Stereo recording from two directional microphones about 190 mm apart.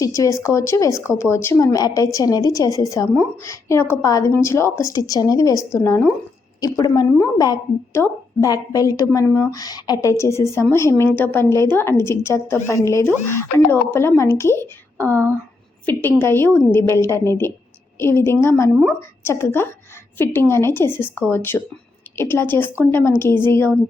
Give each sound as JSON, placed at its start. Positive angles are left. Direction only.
{"t": 0.0, "sound": "a woman's voice", "side_deg": 15}